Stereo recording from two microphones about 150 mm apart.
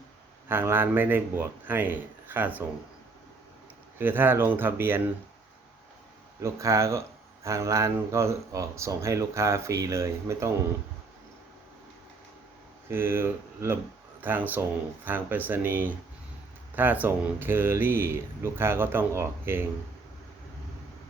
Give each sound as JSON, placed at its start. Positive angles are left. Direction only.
{"t": 0.4, "sound": "speech", "side_deg": -15}
{"t": 3.9, "sound": "speech", "side_deg": -15}
{"t": 6.4, "sound": "speech", "side_deg": -20}
{"t": 12.9, "sound": "speech", "side_deg": -15}